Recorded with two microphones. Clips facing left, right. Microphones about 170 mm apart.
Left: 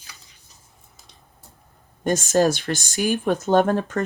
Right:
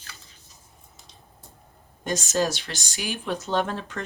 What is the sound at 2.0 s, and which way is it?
Speech, 55° left (ahead or behind).